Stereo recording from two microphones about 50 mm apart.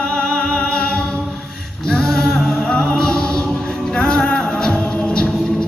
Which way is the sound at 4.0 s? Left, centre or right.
Centre.